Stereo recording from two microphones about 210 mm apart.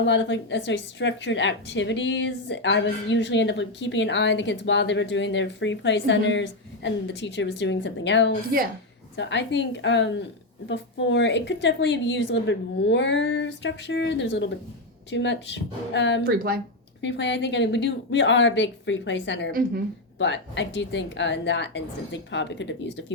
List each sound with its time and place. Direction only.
0.0 s a woman's voice: 60° left (ahead or behind)
16.2 s speech: 45° right (ahead or behind)
17.0 s a woman's voice: 60° left (ahead or behind)